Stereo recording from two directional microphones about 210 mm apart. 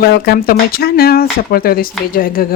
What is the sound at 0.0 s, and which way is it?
Speech, 50° left (ahead or behind).